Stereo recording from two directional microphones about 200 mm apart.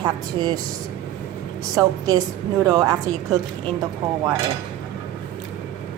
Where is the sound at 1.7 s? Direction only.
20° right (ahead or behind).